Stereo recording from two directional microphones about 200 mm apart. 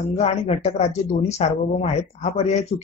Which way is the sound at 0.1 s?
35° left (ahead or behind).